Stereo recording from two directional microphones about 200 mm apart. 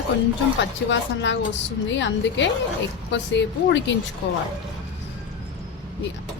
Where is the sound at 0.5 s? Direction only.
65° left (ahead or behind).